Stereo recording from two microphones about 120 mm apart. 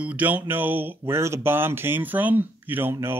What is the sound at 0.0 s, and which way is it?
Speech, 10° right (ahead or behind).